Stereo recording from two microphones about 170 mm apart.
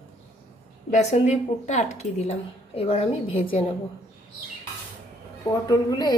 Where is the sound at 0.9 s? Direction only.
40° left (ahead or behind).